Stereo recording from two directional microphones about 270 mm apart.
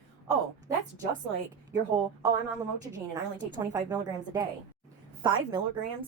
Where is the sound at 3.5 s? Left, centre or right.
Centre.